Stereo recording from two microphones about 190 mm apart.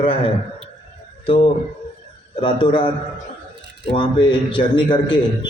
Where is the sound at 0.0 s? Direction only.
30° left (ahead or behind).